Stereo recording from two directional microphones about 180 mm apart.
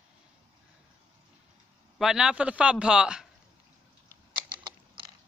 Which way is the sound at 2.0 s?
5° right (ahead or behind).